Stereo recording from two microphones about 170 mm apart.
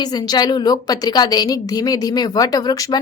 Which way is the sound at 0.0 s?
25° left (ahead or behind).